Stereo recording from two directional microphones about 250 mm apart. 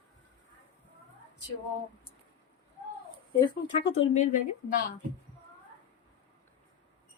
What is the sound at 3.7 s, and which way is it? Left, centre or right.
A woman's voice, left.